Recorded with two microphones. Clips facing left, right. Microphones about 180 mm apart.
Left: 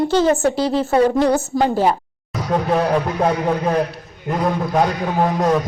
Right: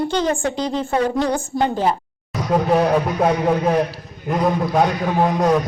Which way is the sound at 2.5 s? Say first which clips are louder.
Right 1 dB; 5° right (ahead or behind).